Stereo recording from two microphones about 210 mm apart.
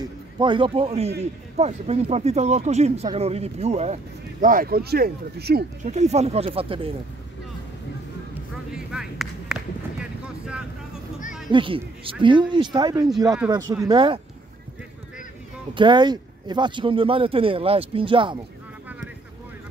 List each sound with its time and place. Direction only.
0.0 s a man's voice: 20° right (ahead or behind); by 5.7 s 50° right (ahead or behind)
5.9 s speech: 30° right (ahead or behind)
8.7 s a sound: centre (ahead or behind)
11.5 s speech: 25° right (ahead or behind)
15.7 s speech: 20° right (ahead or behind)